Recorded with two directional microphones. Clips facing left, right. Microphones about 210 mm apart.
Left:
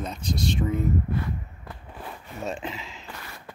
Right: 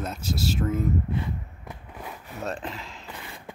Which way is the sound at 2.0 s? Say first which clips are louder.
Even; centre (ahead or behind).